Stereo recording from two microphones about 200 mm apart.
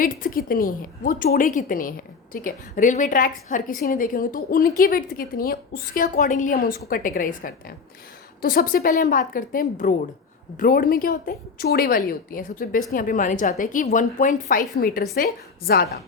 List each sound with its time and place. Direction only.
0.0 s a woman's voice: 45° left (ahead or behind)